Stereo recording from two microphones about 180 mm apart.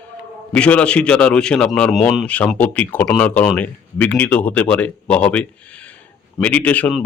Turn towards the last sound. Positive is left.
turn(degrees=10)  # may be behind; listen again after turning